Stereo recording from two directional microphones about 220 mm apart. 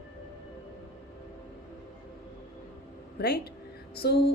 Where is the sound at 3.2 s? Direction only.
45° left (ahead or behind).